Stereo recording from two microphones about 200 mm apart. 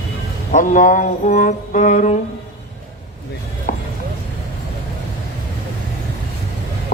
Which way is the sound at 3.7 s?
40° left (ahead or behind).